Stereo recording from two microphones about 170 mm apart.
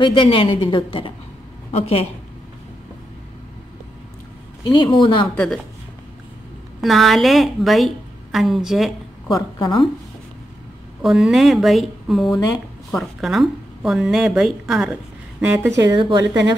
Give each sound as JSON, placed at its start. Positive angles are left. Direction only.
{"t": 0.0, "sound": "a woman's voice", "side_deg": 30}
{"t": 4.7, "sound": "a woman's voice", "side_deg": 25}
{"t": 5.3, "sound": "a woman's voice", "side_deg": 5}
{"t": 6.8, "sound": "a woman's voice", "side_deg": 0}
{"t": 9.3, "sound": "a woman's voice", "side_deg": 25}
{"t": 11.0, "sound": "a woman's voice", "side_deg": -5}
{"t": 15.7, "sound": "speech", "side_deg": -25}